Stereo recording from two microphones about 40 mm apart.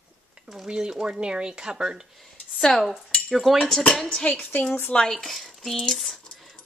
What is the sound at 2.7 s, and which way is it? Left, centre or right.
Speech, centre.